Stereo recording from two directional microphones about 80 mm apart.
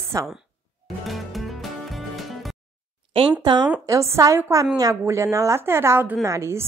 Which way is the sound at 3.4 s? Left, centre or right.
Right.